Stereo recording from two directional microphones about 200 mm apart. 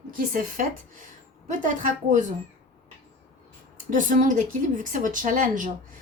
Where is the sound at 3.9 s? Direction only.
40° right (ahead or behind).